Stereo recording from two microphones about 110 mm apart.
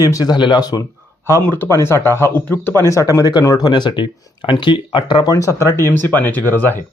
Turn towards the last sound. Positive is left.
turn(degrees=20)  # may be behind; listen again after turning